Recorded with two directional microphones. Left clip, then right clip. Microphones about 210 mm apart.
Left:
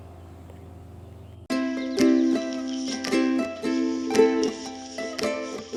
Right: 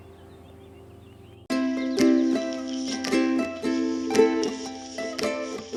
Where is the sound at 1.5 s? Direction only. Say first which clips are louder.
Right 1 dB; centre (ahead or behind).